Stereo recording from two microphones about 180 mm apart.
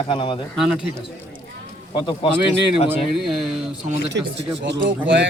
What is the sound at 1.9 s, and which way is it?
Speech, 25° left (ahead or behind).